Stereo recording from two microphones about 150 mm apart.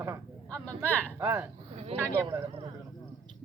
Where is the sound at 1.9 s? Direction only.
40° right (ahead or behind).